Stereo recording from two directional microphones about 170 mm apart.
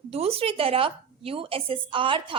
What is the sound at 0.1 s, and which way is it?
A woman's voice, 35° right (ahead or behind).